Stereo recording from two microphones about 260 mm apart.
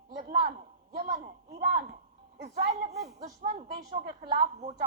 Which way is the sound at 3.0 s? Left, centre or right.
Right.